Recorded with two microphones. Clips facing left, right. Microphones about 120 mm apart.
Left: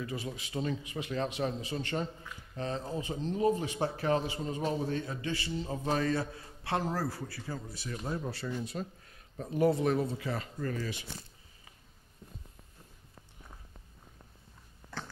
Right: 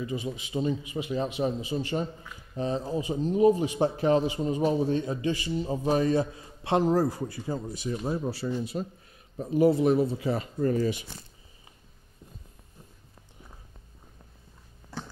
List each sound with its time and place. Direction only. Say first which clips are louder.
0.0 s a man's voice: right 5 dB; centre (ahead or behind)
9.4 s a man's voice: right 6 dB; 5° right (ahead or behind)
10.1 s speech: right 7 dB; 20° right (ahead or behind)